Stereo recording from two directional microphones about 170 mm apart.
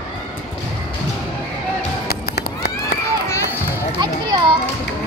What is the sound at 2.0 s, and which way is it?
Run, 70° left (ahead or behind).